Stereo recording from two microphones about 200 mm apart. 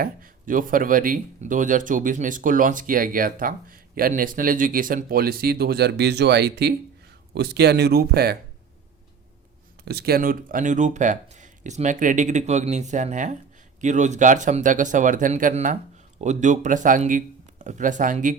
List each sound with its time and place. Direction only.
0.0 s speech: 45° right (ahead or behind)
9.8 s speech: 50° right (ahead or behind)